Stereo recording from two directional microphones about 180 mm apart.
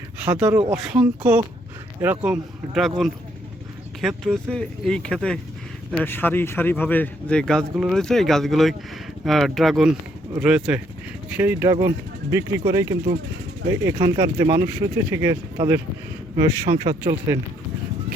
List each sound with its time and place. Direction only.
0.2 s speech: 5° right (ahead or behind)
4.0 s speech: centre (ahead or behind); by 17.0 s 20° right (ahead or behind)